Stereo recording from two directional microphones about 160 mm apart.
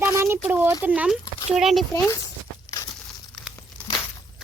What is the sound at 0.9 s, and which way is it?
Speech, 5° right (ahead or behind).